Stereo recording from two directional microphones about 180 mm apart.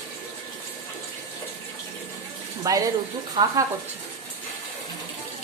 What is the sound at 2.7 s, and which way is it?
Speech, 20° right (ahead or behind).